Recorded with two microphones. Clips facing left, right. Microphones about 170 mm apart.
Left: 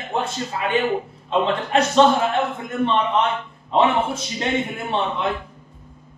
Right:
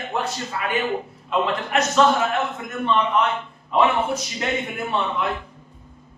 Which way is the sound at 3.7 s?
25° left (ahead or behind).